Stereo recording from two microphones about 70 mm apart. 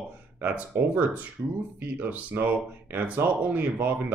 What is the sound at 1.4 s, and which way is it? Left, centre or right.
Speech, right.